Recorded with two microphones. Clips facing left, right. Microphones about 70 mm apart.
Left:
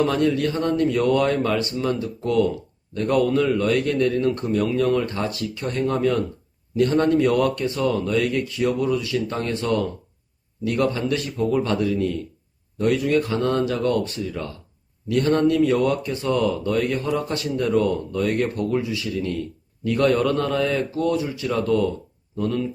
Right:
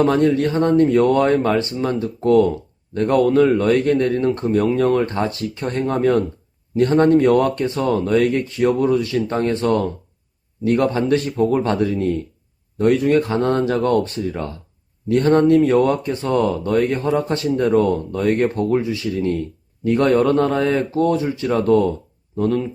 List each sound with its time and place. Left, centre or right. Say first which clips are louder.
0.0 s speech: right 4 dB; right